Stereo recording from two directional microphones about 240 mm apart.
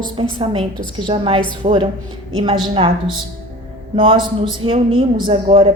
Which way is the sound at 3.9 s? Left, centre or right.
Right.